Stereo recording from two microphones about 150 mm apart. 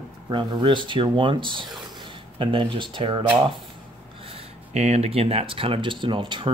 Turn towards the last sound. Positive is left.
turn(degrees=-30)  # may be behind; listen again after turning